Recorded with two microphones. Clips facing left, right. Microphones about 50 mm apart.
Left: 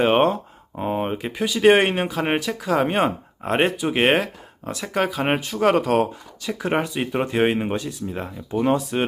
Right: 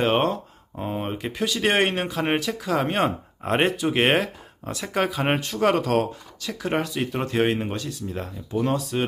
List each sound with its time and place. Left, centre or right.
0.0 s speech: centre